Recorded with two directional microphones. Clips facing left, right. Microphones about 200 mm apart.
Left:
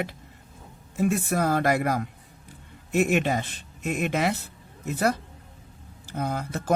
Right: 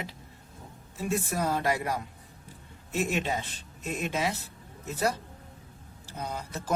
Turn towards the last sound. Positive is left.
turn(degrees=60)  # may be behind; listen again after turning